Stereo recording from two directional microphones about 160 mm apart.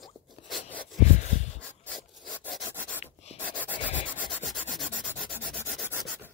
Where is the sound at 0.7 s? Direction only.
10° left (ahead or behind).